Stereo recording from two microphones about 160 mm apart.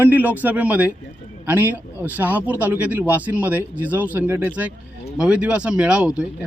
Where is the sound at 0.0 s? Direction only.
10° right (ahead or behind).